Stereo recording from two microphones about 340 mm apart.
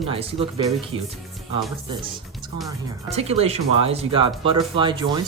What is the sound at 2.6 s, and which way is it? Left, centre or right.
Speech, centre.